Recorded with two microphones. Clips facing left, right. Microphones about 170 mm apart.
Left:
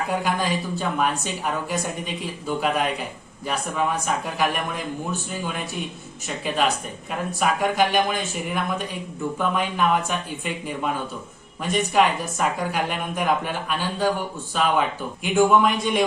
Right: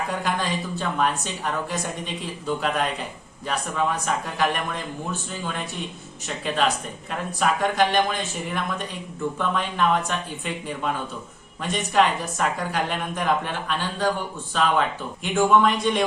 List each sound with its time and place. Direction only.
0.3 s a woman's voice: 5° left (ahead or behind)
2.6 s a woman's voice: 5° left (ahead or behind)
6.2 s a woman's voice: 5° left (ahead or behind)
9.4 s a woman's voice: 5° left (ahead or behind)